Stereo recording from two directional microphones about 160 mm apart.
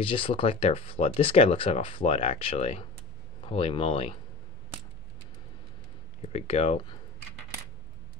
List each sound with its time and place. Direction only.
0.0 s speech: 35° left (ahead or behind)
6.2 s speech: 40° left (ahead or behind)